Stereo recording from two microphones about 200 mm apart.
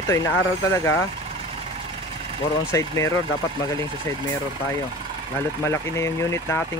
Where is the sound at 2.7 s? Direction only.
15° left (ahead or behind).